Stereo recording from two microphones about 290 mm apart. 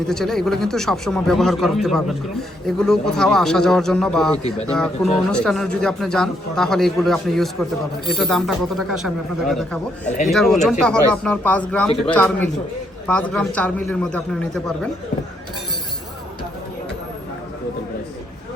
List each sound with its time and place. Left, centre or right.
0.1 s speech: centre